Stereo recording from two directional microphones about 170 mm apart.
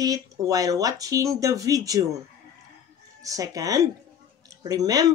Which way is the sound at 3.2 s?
20° right (ahead or behind).